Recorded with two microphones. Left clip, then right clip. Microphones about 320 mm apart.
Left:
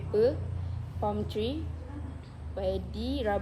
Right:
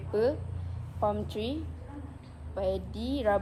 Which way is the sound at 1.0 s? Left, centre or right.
Right.